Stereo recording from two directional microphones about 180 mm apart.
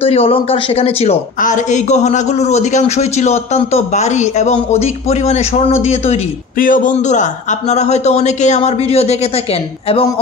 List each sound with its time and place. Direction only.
0.0 s speech: 30° left (ahead or behind)
6.6 s speech: 50° left (ahead or behind)